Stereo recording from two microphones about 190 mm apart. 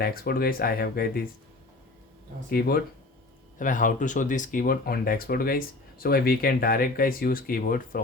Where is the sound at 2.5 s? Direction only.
55° left (ahead or behind).